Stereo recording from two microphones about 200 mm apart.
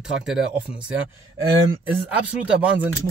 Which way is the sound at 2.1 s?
5° right (ahead or behind).